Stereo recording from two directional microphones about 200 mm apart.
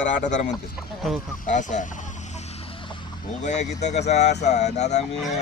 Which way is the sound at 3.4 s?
35° left (ahead or behind).